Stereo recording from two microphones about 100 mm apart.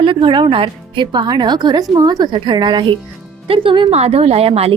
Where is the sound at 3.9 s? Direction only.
90° right.